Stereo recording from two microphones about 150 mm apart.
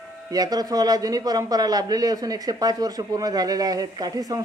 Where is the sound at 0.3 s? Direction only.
25° right (ahead or behind).